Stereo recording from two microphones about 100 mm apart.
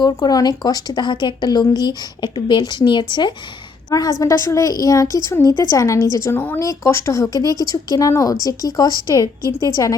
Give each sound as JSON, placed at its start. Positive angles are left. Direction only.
{"t": 0.0, "sound": "a woman's voice", "side_deg": 40}
{"t": 3.8, "sound": "a woman's voice", "side_deg": 40}
{"t": 6.6, "sound": "speech", "side_deg": 30}